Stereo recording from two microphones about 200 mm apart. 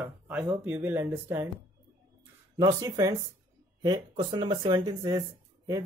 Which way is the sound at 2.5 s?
20° right (ahead or behind).